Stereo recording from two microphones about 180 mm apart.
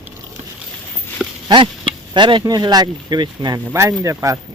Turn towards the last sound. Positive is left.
turn(degrees=-15)  # may be behind; listen again after turning